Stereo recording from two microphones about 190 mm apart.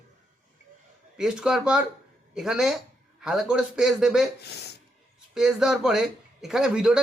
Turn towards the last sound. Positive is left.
turn(degrees=-5)  # may be behind; listen again after turning